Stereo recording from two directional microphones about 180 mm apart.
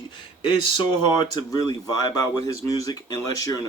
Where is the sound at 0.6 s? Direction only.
25° left (ahead or behind).